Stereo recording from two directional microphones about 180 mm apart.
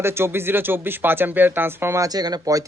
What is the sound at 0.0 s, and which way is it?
Speech, 15° right (ahead or behind).